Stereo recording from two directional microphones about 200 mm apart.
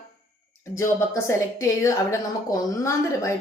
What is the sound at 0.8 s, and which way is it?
Speech, 15° left (ahead or behind).